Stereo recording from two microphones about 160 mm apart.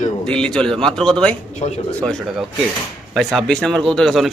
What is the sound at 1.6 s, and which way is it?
Speech, 45° left (ahead or behind).